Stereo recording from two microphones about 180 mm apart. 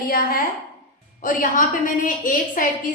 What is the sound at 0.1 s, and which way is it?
A woman's voice, 50° left (ahead or behind).